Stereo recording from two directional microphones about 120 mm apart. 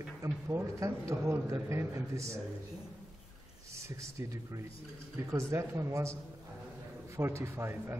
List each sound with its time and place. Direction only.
0.2 s a man's voice: 25° right (ahead or behind)
3.7 s a man's voice: 25° right (ahead or behind)
7.2 s a man's voice: 20° right (ahead or behind)